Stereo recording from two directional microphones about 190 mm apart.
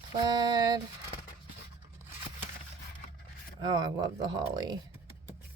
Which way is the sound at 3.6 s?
20° right (ahead or behind).